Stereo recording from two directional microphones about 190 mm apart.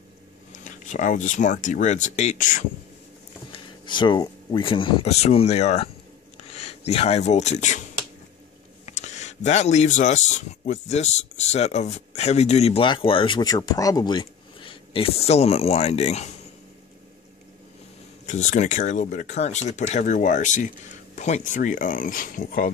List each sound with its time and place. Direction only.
0.5 s speech: 40° left (ahead or behind)
3.5 s speech: 25° left (ahead or behind)
6.3 s a sound: 35° left (ahead or behind)
6.9 s speech: 35° left (ahead or behind)
8.8 s speech: 40° left (ahead or behind)
18.2 s speech: 40° left (ahead or behind)